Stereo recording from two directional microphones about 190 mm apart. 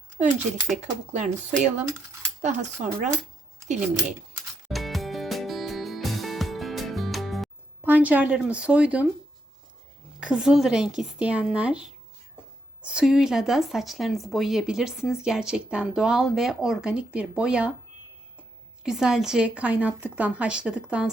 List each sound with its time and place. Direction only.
0.8 s speech: 40° right (ahead or behind)
4.7 s music: centre (ahead or behind)
10.2 s speech: 5° right (ahead or behind)
18.8 s speech: 5° right (ahead or behind)